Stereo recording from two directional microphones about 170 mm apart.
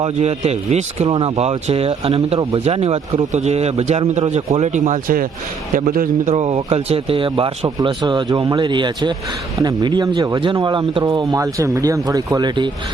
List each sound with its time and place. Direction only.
0.0 s a man's voice: 40° right (ahead or behind)
6.3 s a man's voice: 40° right (ahead or behind)